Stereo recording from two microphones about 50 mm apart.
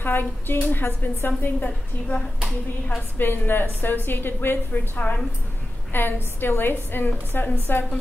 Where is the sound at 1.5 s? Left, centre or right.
Left.